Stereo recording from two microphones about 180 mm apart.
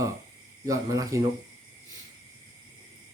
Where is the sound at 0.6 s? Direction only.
20° right (ahead or behind).